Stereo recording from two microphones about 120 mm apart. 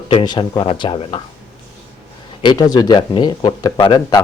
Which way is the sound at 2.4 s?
30° left (ahead or behind).